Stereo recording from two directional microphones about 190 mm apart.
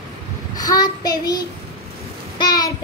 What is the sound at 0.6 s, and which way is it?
Child singing, 20° left (ahead or behind).